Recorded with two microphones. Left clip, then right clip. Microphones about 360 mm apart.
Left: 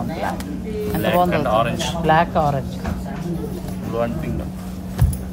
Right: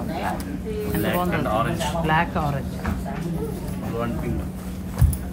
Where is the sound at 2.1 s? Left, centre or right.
Left.